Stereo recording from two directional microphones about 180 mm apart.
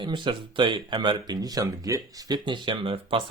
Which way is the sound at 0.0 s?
25° right (ahead or behind).